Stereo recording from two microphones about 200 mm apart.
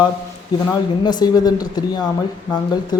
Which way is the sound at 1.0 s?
20° left (ahead or behind).